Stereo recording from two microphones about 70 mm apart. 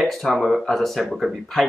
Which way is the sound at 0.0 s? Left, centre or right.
Centre.